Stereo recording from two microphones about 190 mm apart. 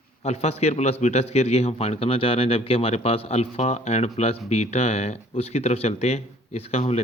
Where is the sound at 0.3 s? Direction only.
35° left (ahead or behind).